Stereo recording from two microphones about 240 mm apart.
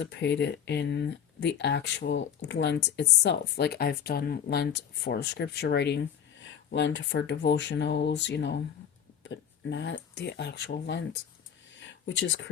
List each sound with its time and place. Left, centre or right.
0.0 s speech: left